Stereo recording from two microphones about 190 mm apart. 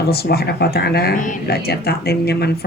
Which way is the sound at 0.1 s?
55° left (ahead or behind).